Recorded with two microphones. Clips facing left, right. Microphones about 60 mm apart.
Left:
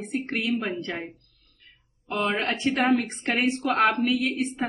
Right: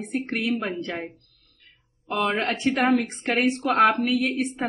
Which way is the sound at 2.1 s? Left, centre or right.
Centre.